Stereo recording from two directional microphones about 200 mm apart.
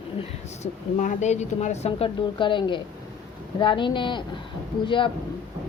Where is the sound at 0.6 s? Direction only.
35° left (ahead or behind).